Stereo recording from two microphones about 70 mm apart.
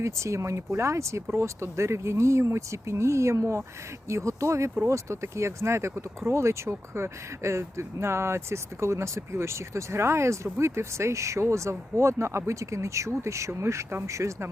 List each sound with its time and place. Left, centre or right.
0.0 s speech: right